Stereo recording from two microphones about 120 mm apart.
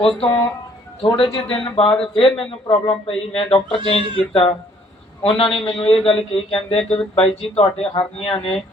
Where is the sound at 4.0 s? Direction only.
45° right (ahead or behind).